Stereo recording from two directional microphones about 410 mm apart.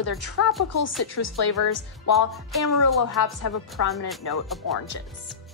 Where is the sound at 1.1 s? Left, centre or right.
Left.